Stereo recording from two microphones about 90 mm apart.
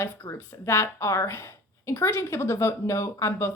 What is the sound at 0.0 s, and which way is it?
Speech, 30° left (ahead or behind).